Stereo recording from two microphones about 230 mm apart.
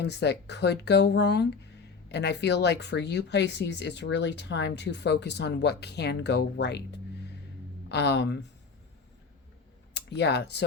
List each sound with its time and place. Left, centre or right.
0.0 s speech: left
7.9 s speech: left
9.9 s speech: left